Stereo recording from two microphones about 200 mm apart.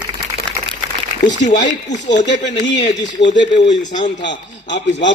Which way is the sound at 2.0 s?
60° left (ahead or behind).